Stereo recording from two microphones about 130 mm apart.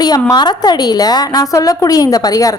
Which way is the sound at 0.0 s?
30° left (ahead or behind).